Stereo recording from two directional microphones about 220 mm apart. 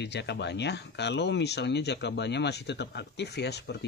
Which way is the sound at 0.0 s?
50° left (ahead or behind).